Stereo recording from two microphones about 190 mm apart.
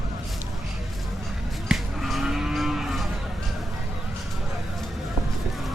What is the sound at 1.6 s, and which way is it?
Cattle, centre (ahead or behind).